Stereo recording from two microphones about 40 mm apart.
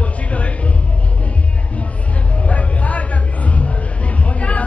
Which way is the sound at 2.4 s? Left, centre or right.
Left.